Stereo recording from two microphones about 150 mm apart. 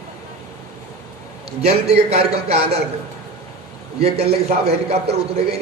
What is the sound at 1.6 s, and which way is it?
A man's voice, 45° right (ahead or behind).